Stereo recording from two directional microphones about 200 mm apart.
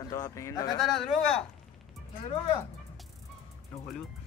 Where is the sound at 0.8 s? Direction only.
Centre (ahead or behind).